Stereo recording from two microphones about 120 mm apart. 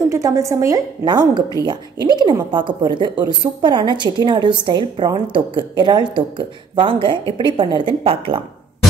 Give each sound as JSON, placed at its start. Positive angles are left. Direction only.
{"t": 0.1, "sound": "a woman's voice", "side_deg": -25}